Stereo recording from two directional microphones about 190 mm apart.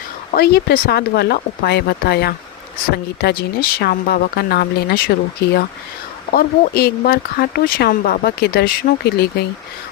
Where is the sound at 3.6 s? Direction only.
55° left (ahead or behind).